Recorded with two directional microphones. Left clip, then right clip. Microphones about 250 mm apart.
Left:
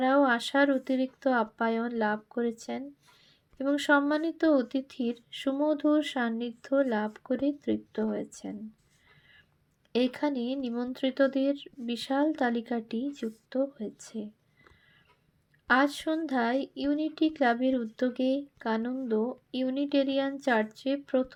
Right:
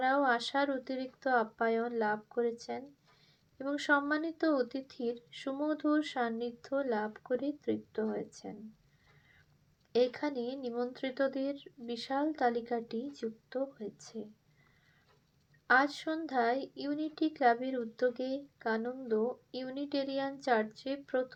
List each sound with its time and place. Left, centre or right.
0.0 s speech: left
9.9 s speech: left
15.6 s speech: left